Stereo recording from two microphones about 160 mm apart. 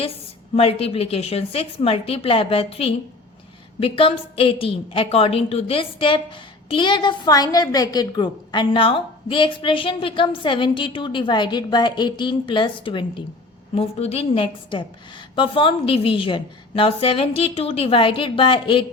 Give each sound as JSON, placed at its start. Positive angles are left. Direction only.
{"t": 0.5, "sound": "a woman's voice", "side_deg": 35}